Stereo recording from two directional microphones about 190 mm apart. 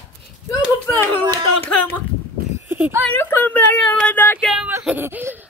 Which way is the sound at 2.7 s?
10° right (ahead or behind).